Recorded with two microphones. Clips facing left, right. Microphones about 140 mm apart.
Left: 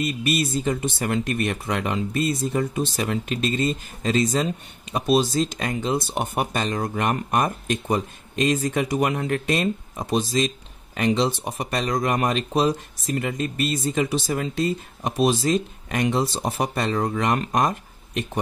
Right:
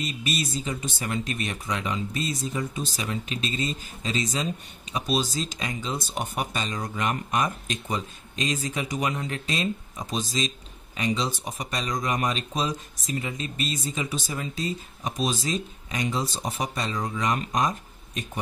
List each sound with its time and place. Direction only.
0.0 s speech: 60° left (ahead or behind)